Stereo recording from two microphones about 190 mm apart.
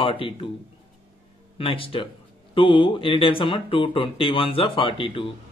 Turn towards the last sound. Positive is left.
turn(degrees=25)  # may be behind; listen again after turning